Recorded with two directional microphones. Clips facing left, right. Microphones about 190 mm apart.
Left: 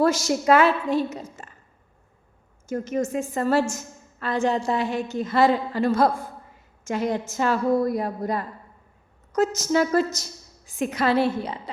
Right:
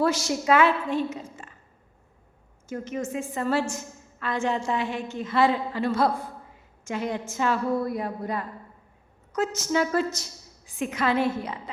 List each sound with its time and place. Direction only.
0.0 s a woman's voice: 45° left (ahead or behind)
2.6 s a woman's voice: 40° left (ahead or behind)